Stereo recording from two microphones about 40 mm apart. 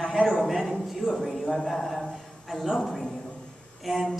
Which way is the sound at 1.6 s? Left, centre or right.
Centre.